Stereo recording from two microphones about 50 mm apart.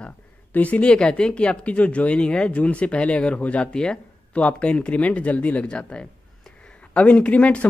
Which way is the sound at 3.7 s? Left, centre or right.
Centre.